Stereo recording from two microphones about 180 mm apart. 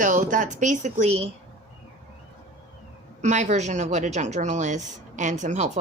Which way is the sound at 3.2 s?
40° right (ahead or behind).